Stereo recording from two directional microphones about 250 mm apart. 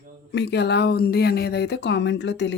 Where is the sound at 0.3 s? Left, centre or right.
Left.